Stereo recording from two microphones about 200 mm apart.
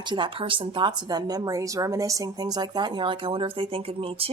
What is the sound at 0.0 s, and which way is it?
A woman's voice, 25° right (ahead or behind).